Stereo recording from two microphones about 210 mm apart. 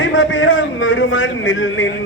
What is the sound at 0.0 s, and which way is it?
A man's voice, 65° left (ahead or behind).